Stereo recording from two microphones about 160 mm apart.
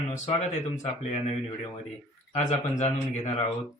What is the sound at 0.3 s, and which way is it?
Speech, 45° left (ahead or behind).